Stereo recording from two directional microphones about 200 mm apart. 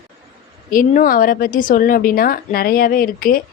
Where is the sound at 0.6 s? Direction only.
40° left (ahead or behind).